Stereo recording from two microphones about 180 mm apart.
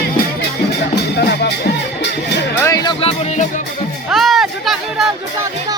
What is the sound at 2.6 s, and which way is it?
Music, 20° left (ahead or behind).